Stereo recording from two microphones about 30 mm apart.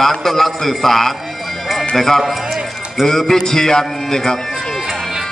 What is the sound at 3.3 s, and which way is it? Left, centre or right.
A man's voice, centre.